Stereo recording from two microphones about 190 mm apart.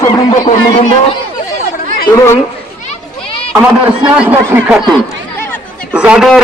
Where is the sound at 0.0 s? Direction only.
20° left (ahead or behind).